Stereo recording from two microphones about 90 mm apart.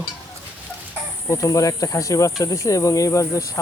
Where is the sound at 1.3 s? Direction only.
35° left (ahead or behind).